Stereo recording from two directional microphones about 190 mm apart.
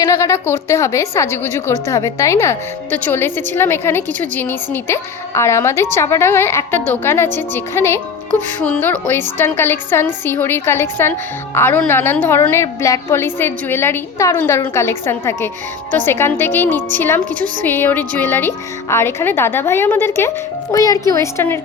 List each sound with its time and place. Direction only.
0.1 s a woman's voice: 15° left (ahead or behind)